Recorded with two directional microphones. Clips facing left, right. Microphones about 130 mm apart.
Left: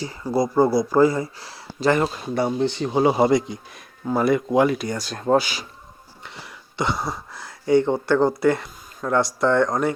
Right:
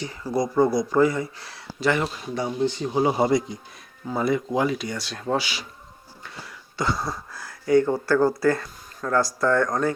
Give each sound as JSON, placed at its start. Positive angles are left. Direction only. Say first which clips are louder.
{"t": 0.0, "sound": "speech", "louder": "left 3 dB", "side_deg": 25}
{"t": 2.3, "sound": "speech", "louder": "left 2 dB", "side_deg": 70}
{"t": 4.0, "sound": "speech", "louder": "left 4 dB", "side_deg": 70}
{"t": 6.2, "sound": "cough", "louder": "left 1 dB", "side_deg": 20}
{"t": 7.3, "sound": "speech", "louder": "left 2 dB", "side_deg": 25}